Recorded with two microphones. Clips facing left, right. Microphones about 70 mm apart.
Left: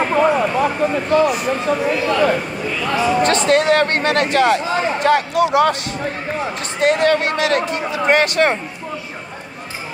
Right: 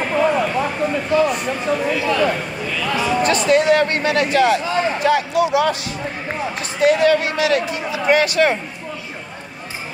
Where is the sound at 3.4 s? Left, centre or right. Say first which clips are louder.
Right 2 dB; left.